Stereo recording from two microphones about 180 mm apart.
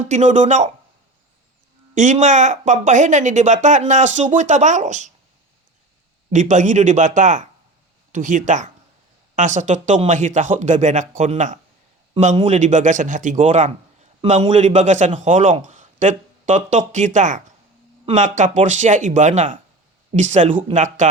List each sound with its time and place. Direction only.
0.0 s speech: 40° right (ahead or behind)
2.0 s speech: 45° right (ahead or behind)
6.3 s speech: 45° right (ahead or behind)